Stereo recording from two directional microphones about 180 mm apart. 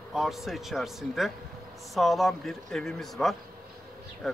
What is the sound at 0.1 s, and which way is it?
Speech, centre (ahead or behind).